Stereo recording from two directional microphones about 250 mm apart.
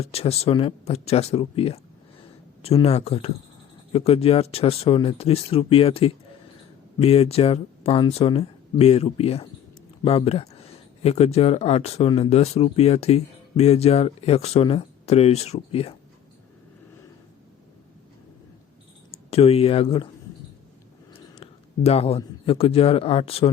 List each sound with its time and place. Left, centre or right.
0.0 s speech: left
19.3 s speech: left
21.1 s a man's voice: left